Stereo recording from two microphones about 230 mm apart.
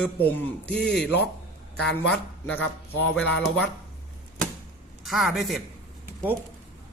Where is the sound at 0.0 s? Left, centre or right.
Centre.